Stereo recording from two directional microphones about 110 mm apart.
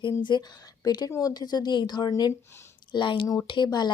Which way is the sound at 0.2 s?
45° left (ahead or behind).